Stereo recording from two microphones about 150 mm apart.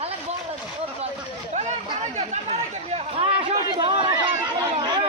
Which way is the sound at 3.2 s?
30° right (ahead or behind).